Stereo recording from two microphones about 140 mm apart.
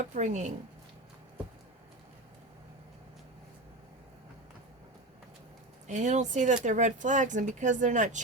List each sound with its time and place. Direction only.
0.1 s speech: 60° right (ahead or behind)
5.9 s speech: 60° right (ahead or behind)